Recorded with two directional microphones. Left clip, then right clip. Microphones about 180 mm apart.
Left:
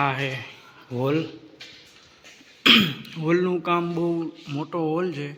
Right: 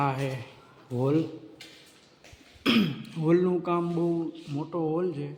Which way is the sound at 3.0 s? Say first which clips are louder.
Left 2 dB; 15° right (ahead or behind).